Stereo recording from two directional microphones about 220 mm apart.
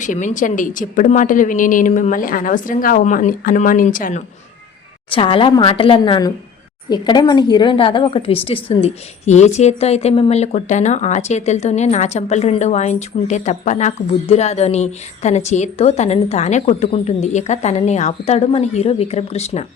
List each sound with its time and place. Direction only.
0.0 s a woman's voice: 35° left (ahead or behind)
5.1 s a woman's voice: 25° left (ahead or behind)